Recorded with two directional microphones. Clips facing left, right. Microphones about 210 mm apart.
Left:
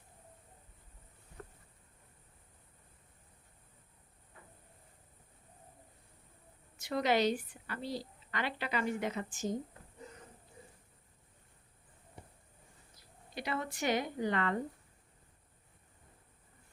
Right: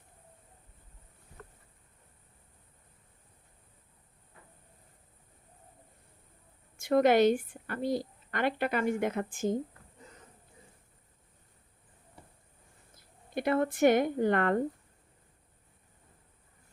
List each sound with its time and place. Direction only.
6.7 s a woman's voice: 50° right (ahead or behind)
13.0 s speech: 55° right (ahead or behind)